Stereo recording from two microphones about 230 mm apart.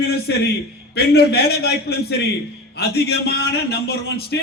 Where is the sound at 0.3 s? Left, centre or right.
Left.